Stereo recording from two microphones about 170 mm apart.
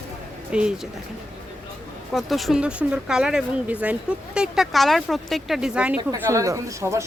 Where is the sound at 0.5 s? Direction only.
5° right (ahead or behind).